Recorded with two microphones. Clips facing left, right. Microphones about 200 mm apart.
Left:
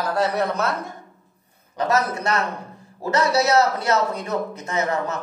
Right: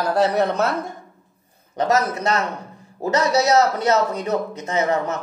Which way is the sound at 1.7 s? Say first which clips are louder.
Right 2 dB; 25° right (ahead or behind).